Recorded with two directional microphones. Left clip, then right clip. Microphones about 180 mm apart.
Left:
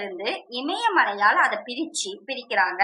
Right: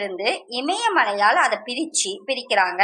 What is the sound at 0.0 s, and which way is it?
A woman's voice, 30° right (ahead or behind).